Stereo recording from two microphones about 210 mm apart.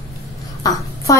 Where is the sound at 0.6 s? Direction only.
15° left (ahead or behind).